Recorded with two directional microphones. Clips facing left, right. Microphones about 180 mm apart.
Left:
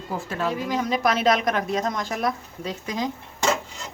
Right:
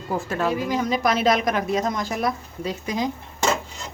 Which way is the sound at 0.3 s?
50° right (ahead or behind).